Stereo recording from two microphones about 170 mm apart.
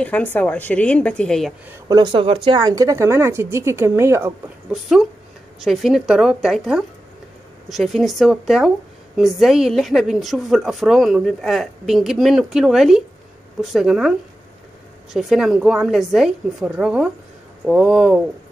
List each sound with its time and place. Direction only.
0.0 s a woman's voice: 10° left (ahead or behind)
1.7 s speech: 25° right (ahead or behind)
5.6 s a woman's voice: centre (ahead or behind)
15.1 s a woman's voice: centre (ahead or behind)